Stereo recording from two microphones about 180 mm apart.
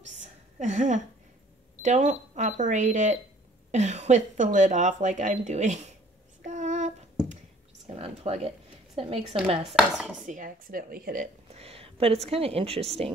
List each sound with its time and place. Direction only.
0.2 s a sound: 40° right (ahead or behind)
1.8 s speech: 40° right (ahead or behind)
6.4 s child singing: 45° right (ahead or behind)
7.8 s a woman's voice: 35° right (ahead or behind)
9.8 s chopping: 5° right (ahead or behind)
10.2 s speech: 45° right (ahead or behind)
11.5 s speech: 35° right (ahead or behind)